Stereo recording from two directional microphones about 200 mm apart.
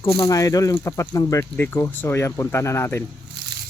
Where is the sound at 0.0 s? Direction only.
25° left (ahead or behind).